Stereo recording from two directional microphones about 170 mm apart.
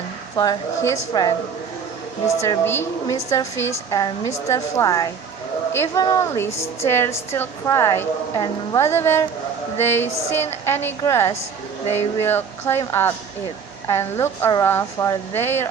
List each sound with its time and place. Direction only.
0.3 s a woman's voice: 20° left (ahead or behind)
2.3 s a woman's voice: 20° left (ahead or behind)